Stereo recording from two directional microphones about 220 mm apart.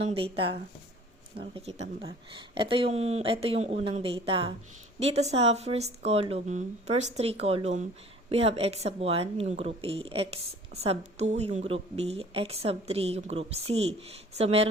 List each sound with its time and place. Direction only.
0.0 s a woman's voice: 25° right (ahead or behind)